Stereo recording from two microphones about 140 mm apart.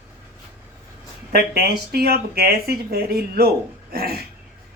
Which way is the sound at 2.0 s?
90° right.